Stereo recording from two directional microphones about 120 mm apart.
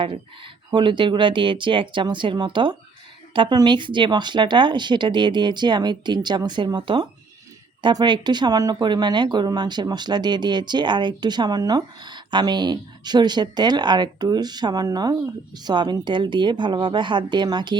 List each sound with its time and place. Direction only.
0.0 s speech: 45° right (ahead or behind)